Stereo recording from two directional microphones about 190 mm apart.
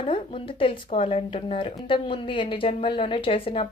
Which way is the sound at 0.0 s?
25° left (ahead or behind).